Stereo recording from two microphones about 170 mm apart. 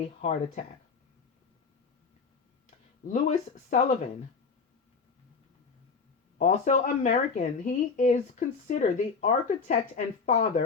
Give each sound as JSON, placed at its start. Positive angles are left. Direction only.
{"t": 0.0, "sound": "speech", "side_deg": 40}
{"t": 2.6, "sound": "speech", "side_deg": 50}
{"t": 6.4, "sound": "speech", "side_deg": 50}